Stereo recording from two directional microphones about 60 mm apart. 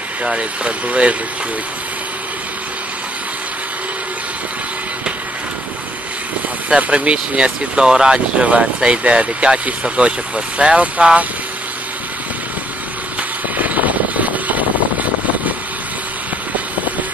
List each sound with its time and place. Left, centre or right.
0.2 s speech: centre
6.7 s speech: centre
13.6 s vehicle: right